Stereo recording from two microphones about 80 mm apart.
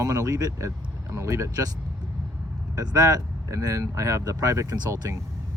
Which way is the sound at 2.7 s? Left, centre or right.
Right.